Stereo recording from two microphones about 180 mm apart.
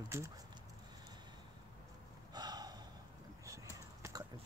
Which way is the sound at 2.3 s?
20° right (ahead or behind).